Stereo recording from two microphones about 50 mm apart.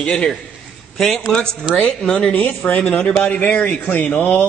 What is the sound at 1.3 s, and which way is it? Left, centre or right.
A man's voice, centre.